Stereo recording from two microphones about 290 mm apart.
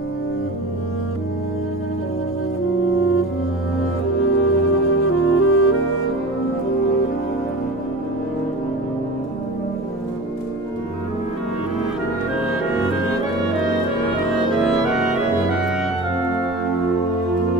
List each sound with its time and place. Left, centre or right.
3.0 s music: left
4.3 s music: left
14.9 s music: centre